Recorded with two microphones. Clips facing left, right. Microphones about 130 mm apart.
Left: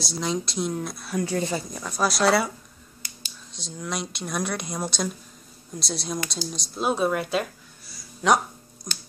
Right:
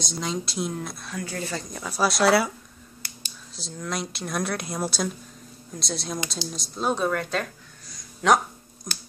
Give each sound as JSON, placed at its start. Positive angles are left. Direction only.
{"t": 0.0, "sound": "speech", "side_deg": 0}
{"t": 1.1, "sound": "speech", "side_deg": 20}
{"t": 1.6, "sound": "speech", "side_deg": 0}
{"t": 3.5, "sound": "speech", "side_deg": 0}